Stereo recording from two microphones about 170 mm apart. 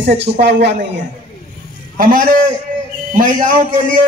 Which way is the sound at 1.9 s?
55° right (ahead or behind).